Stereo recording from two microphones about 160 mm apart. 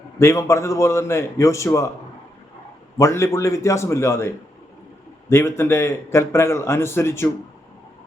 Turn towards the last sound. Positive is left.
turn(degrees=15)  # may be behind; listen again after turning